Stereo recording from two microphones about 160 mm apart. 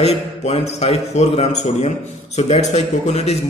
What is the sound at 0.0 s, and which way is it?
A man's voice, 40° left (ahead or behind).